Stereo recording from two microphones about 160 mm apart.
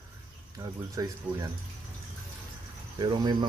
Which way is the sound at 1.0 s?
20° right (ahead or behind).